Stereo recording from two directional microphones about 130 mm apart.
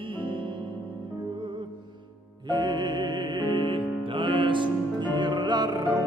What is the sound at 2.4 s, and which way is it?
Music, 35° right (ahead or behind).